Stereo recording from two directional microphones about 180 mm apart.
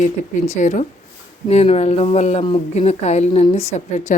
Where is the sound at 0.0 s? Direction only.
40° left (ahead or behind).